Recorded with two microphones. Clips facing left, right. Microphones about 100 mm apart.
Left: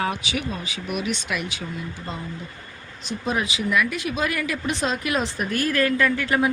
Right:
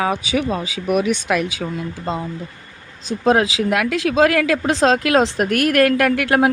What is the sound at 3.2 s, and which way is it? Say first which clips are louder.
Speech: right 9 dB; 90° right.